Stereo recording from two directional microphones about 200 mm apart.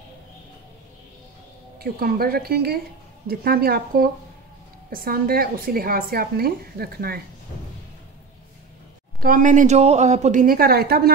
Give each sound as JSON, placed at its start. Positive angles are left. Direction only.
{"t": 1.8, "sound": "a woman's voice", "side_deg": -50}
{"t": 9.2, "sound": "a woman's voice", "side_deg": -40}